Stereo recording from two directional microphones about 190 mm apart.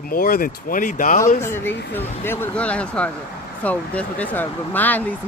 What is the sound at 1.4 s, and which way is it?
Speech, 10° left (ahead or behind).